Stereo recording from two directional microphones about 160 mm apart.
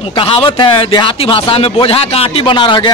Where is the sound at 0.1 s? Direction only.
35° left (ahead or behind).